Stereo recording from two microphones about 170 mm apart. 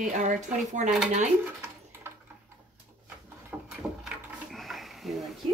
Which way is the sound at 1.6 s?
15° right (ahead or behind).